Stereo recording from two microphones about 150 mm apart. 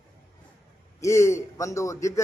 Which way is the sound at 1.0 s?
20° left (ahead or behind).